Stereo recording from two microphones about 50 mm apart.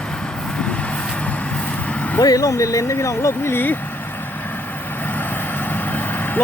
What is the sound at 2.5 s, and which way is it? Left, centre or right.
Speech, left.